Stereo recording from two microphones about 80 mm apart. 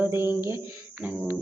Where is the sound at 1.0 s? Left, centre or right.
Centre.